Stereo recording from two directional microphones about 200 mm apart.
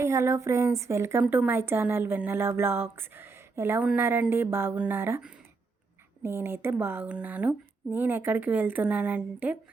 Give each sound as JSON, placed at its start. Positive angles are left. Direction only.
{"t": 0.0, "sound": "a woman's voice", "side_deg": -15}